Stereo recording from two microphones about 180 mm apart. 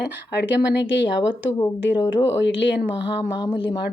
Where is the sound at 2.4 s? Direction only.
80° left.